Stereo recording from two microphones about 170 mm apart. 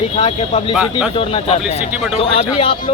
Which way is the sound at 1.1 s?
35° left (ahead or behind).